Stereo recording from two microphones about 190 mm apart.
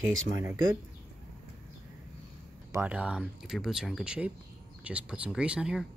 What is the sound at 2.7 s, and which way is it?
Speech, 10° right (ahead or behind).